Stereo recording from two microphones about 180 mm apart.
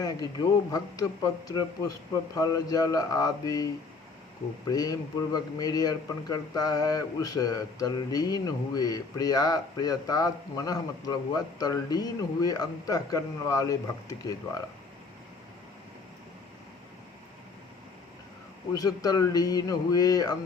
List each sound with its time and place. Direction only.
0.0 s speech: 20° left (ahead or behind)
4.7 s speech: 20° left (ahead or behind)
18.7 s speech: 20° left (ahead or behind)